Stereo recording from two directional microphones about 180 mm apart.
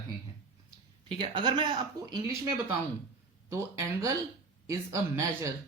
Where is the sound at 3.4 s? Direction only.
15° right (ahead or behind).